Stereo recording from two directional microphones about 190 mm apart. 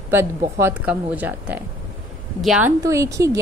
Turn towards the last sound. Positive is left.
turn(degrees=-15)  # may be behind; listen again after turning